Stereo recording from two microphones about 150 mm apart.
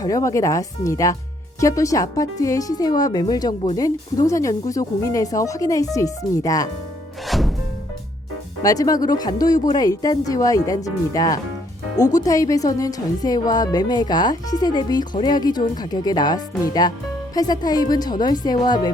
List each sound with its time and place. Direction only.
0.0 s speech: 20° left (ahead or behind)
7.3 s music: centre (ahead or behind)
8.6 s speech: 25° left (ahead or behind)